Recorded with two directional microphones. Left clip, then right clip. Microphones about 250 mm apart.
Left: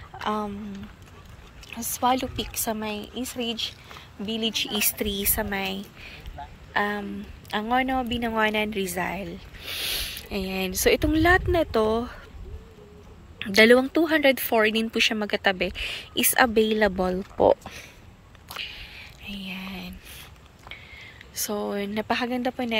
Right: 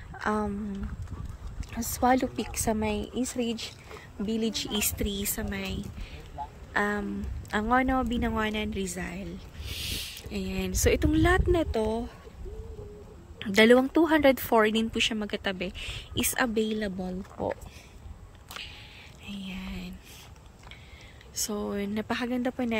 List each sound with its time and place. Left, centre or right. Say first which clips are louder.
0.2 s speech: left 1 dB; centre
2.0 s a woman's voice: left 1 dB; right
4.7 s a woman's voice: left 4 dB; centre
13.4 s a woman's voice: left 3 dB; centre
18.6 s whispering: left 8 dB; centre
21.4 s a woman's voice: left 4 dB; centre